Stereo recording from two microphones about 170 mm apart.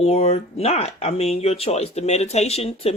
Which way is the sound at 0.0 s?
40° left (ahead or behind).